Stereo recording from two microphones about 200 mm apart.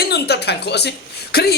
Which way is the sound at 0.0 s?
55° left (ahead or behind).